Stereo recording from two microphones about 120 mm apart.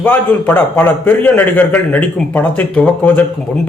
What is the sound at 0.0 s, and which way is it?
A man's voice, 15° left (ahead or behind).